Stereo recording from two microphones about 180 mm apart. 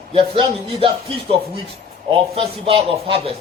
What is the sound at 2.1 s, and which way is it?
A man's voice, 30° right (ahead or behind).